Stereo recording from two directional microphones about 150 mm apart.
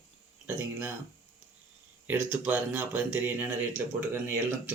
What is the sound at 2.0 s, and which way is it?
Speech, 10° right (ahead or behind).